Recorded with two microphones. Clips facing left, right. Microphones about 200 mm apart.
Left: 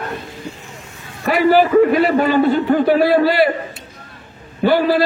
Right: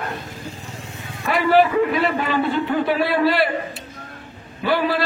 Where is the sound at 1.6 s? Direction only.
45° left (ahead or behind).